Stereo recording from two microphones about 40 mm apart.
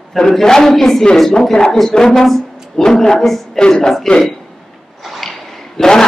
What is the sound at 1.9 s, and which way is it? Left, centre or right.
A woman's voice, left.